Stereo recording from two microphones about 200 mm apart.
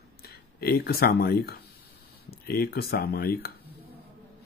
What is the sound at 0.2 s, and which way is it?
Speech, 50° left (ahead or behind).